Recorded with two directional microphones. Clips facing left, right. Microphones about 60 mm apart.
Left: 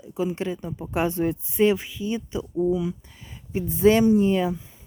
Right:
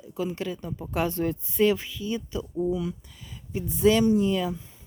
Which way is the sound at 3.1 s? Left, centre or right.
Left.